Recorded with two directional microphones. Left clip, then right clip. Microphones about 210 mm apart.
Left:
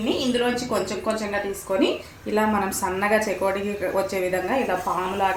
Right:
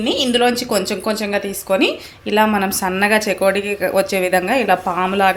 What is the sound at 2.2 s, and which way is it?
Speech, 45° right (ahead or behind).